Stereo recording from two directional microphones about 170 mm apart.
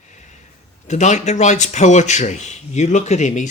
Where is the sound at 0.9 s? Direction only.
45° left (ahead or behind).